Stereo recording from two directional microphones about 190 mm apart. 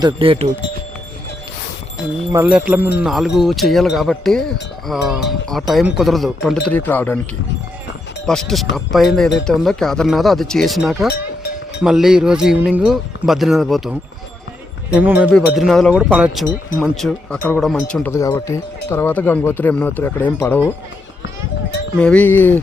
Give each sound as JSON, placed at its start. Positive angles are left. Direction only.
{"t": 0.0, "sound": "speech", "side_deg": -30}
{"t": 2.3, "sound": "speech", "side_deg": -10}
{"t": 8.3, "sound": "speech", "side_deg": 0}
{"t": 14.9, "sound": "speech", "side_deg": -10}
{"t": 21.9, "sound": "speech", "side_deg": 5}